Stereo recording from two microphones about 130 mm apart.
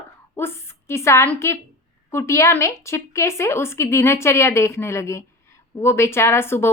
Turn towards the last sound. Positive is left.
turn(degrees=20)  # may be behind; listen again after turning